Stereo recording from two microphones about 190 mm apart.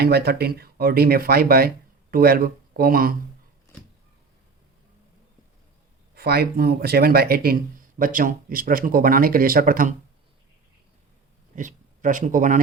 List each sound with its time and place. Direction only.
0.0 s speech: 55° right (ahead or behind)
6.1 s speech: 55° right (ahead or behind)
11.5 s speech: 40° right (ahead or behind)